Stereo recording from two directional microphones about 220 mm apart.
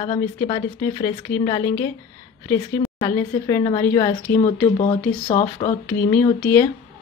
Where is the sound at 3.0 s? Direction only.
20° left (ahead or behind).